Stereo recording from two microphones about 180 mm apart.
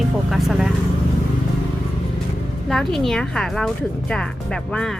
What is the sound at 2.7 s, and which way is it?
A woman's voice, centre (ahead or behind).